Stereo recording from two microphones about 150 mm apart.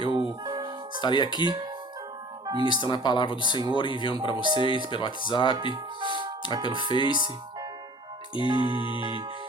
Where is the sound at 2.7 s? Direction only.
30° left (ahead or behind).